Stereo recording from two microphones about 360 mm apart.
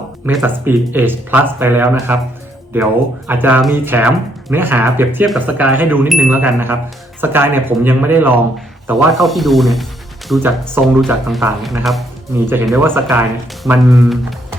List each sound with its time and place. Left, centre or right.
0.3 s speech: centre